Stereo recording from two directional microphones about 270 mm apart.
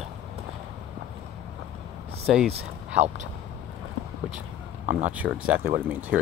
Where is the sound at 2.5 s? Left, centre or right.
Right.